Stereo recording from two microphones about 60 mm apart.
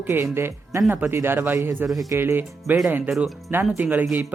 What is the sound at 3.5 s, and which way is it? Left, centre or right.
Speech, right.